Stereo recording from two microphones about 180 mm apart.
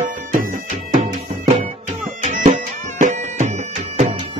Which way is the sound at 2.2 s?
40° right (ahead or behind).